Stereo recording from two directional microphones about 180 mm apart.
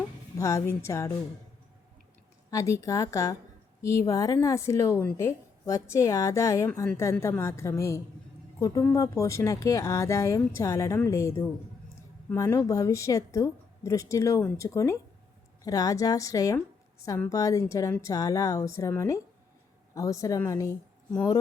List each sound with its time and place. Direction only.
0.3 s a woman's voice: 15° left (ahead or behind)
2.5 s a woman's voice: 15° left (ahead or behind)